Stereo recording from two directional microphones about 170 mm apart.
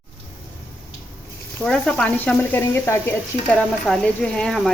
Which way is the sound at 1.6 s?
5° left (ahead or behind).